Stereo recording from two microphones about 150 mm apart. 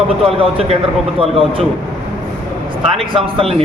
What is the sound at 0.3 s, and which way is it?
A man's voice, 40° right (ahead or behind).